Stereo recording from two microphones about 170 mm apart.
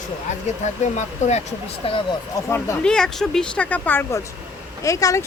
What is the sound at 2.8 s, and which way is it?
Speech, 5° left (ahead or behind).